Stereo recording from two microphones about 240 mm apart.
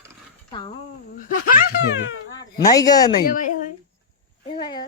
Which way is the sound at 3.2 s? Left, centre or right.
Left.